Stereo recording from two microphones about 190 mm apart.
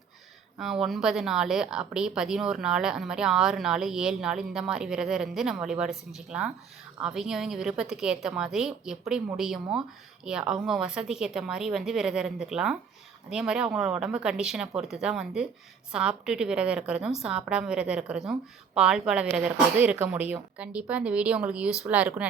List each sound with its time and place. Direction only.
0.6 s a woman's voice: centre (ahead or behind)
10.2 s a woman's voice: 5° right (ahead or behind)